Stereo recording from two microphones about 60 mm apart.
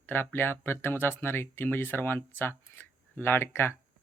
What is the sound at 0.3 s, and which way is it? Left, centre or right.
Speech, left.